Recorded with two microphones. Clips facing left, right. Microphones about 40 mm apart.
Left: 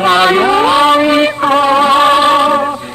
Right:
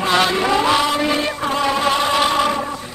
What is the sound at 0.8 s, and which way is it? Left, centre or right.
Music, left.